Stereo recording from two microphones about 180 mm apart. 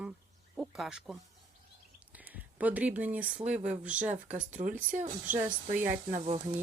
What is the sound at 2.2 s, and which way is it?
Speech, 10° right (ahead or behind).